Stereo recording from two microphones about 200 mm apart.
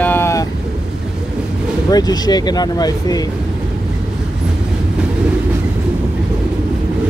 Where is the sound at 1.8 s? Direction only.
20° left (ahead or behind).